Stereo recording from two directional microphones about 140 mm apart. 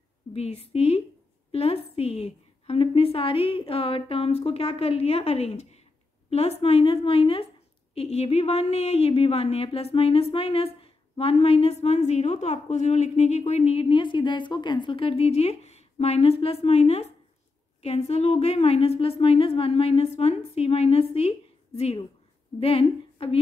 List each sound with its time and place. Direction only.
0.3 s speech: 45° left (ahead or behind)